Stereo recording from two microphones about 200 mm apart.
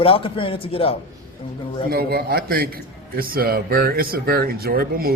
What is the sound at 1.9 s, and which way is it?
A man's voice, 50° right (ahead or behind).